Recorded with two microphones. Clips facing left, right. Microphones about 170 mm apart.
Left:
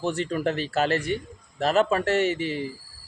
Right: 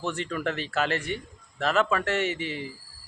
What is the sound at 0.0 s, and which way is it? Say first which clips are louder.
A man's voice: left 4 dB; 40° left (ahead or behind).